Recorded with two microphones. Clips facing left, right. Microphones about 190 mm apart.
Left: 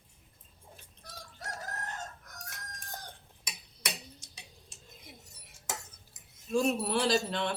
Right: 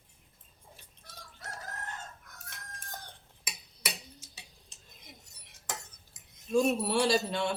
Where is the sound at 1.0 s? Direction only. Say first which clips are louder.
Left 4 dB; 40° left (ahead or behind).